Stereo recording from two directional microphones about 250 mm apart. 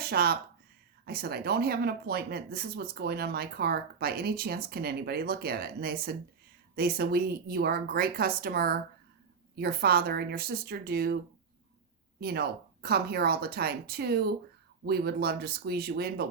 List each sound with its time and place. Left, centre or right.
0.0 s speech: right
12.2 s speech: right